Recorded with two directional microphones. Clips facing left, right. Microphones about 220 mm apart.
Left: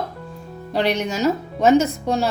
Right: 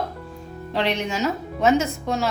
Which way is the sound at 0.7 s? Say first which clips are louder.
Left 3 dB; 40° left (ahead or behind).